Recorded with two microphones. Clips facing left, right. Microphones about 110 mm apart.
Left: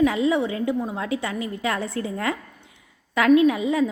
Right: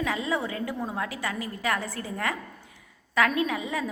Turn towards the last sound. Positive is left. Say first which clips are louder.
# left 11 dB
turn(degrees=25)  # may be behind; listen again after turning